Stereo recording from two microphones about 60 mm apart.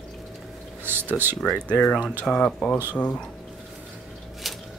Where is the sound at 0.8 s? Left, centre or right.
Right.